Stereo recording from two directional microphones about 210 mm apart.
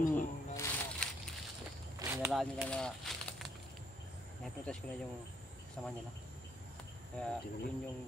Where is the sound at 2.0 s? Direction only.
5° right (ahead or behind).